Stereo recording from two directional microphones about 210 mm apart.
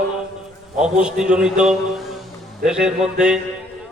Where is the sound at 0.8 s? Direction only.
5° right (ahead or behind).